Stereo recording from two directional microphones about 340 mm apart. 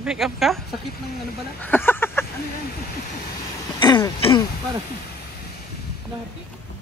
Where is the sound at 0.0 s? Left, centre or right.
Centre.